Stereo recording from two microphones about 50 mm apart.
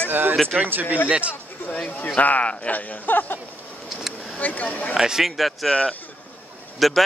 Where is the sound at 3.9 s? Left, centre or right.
Centre.